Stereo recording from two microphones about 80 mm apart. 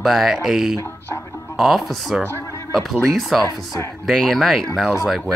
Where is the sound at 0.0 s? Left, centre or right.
Centre.